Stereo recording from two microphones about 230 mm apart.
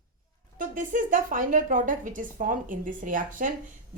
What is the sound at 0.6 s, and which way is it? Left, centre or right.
Speech, right.